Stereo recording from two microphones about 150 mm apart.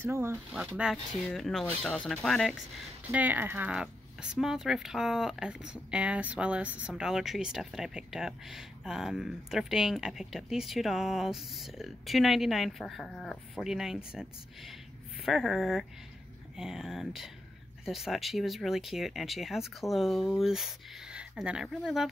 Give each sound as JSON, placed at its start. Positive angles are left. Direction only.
{"t": 0.0, "sound": "speech", "side_deg": -15}
{"t": 3.1, "sound": "speech", "side_deg": -10}